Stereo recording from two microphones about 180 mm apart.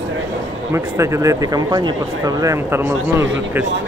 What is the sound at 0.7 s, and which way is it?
Speech, 15° right (ahead or behind).